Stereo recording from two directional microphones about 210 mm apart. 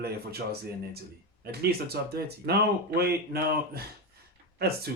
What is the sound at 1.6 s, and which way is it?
Speech, 50° right (ahead or behind).